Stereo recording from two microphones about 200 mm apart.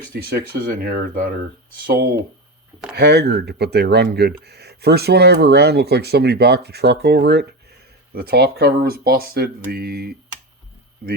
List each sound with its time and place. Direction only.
0.1 s speech: 50° right (ahead or behind)